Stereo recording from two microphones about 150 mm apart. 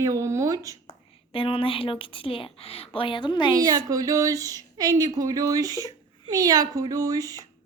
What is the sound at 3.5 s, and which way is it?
Speech, 25° right (ahead or behind).